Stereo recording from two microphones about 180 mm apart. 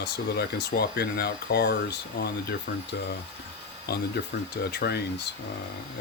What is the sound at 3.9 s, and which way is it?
Speech, 65° left (ahead or behind).